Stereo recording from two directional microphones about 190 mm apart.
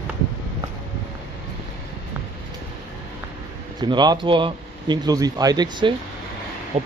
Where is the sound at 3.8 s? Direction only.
20° right (ahead or behind).